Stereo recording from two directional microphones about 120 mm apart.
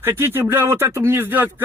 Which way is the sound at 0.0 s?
20° right (ahead or behind).